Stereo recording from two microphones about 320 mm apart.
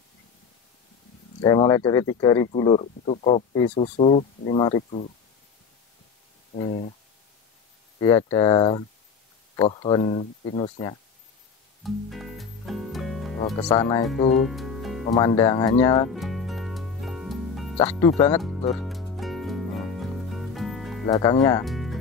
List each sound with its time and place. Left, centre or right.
1.4 s speech: centre
6.5 s speech: left
8.0 s speech: centre
11.8 s music: centre
13.6 s speech: centre
14.3 s music: centre
15.1 s speech: centre
16.1 s music: centre
18.3 s speech: centre
18.8 s music: centre
21.1 s speech: centre
21.6 s music: centre